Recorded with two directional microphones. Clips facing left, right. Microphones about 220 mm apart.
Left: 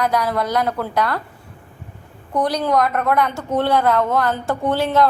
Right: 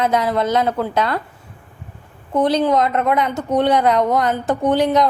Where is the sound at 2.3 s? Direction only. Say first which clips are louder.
Right 3 dB; 25° right (ahead or behind).